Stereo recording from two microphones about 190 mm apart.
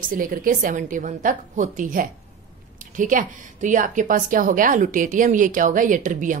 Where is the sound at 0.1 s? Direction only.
45° right (ahead or behind).